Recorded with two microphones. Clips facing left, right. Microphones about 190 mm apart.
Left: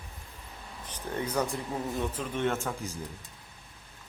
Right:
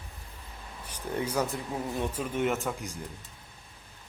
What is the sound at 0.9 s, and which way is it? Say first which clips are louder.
Speech: right 1 dB; 10° right (ahead or behind).